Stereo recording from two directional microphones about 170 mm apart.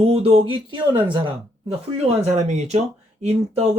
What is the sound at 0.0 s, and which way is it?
Speech, 35° right (ahead or behind).